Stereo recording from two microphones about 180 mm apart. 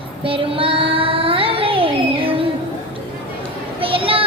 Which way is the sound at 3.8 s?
30° right (ahead or behind).